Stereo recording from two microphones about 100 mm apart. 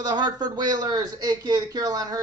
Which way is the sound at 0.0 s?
45° right (ahead or behind).